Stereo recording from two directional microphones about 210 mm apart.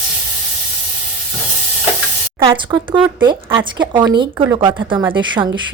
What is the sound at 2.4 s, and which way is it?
Speech, 25° right (ahead or behind).